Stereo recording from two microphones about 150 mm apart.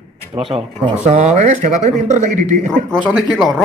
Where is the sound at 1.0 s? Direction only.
50° right (ahead or behind).